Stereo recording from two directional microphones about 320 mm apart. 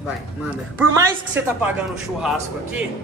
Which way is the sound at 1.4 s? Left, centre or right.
Centre.